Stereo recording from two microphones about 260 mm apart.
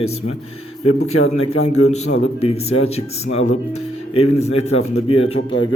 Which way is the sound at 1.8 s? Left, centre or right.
Left.